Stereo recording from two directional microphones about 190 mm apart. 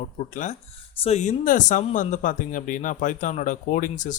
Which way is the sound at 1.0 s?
35° left (ahead or behind).